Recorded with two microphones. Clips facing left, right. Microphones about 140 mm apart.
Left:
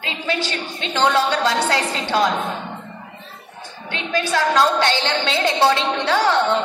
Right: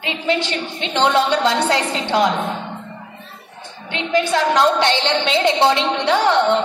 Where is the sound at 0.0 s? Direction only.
20° right (ahead or behind).